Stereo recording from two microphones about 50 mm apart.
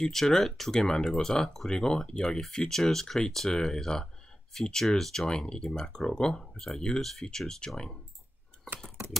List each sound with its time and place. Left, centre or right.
0.0 s speech: centre